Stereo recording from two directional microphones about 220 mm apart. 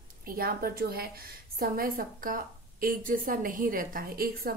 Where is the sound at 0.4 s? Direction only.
45° right (ahead or behind).